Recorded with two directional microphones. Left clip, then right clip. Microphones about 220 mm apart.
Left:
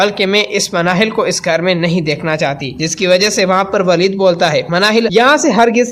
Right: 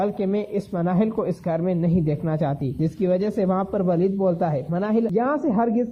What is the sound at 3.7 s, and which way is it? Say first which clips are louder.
A man's voice: left 10 dB; 25° left (ahead or behind).